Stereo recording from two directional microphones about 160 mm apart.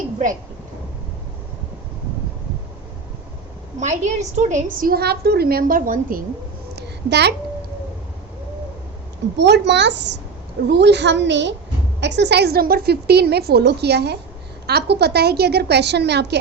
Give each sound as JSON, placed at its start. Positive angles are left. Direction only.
{"t": 3.8, "sound": "a woman's voice", "side_deg": -50}
{"t": 6.7, "sound": "a sound", "side_deg": -90}
{"t": 9.4, "sound": "a woman's voice", "side_deg": -90}